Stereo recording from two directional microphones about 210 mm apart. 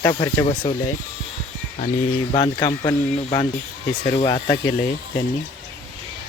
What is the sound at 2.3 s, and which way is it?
Speech, 25° left (ahead or behind).